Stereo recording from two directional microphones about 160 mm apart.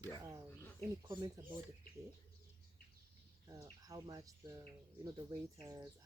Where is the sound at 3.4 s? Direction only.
20° right (ahead or behind).